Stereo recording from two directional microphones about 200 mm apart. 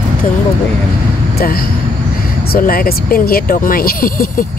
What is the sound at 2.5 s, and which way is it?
Speech, 50° left (ahead or behind).